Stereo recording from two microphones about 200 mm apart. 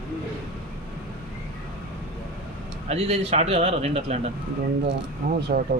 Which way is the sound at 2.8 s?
30° right (ahead or behind).